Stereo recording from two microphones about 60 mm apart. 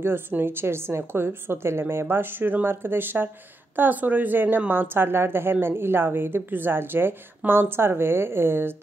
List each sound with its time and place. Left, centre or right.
0.0 s speech: right